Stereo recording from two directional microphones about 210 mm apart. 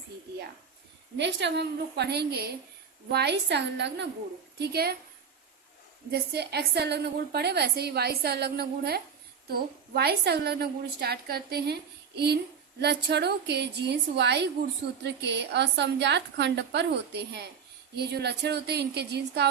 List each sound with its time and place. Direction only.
1.1 s a woman's voice: 55° right (ahead or behind)
6.1 s a woman's voice: 50° right (ahead or behind)